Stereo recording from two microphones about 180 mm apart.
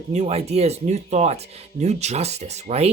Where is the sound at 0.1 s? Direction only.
35° right (ahead or behind).